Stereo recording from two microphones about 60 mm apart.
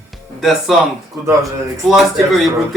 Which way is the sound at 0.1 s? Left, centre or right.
Centre.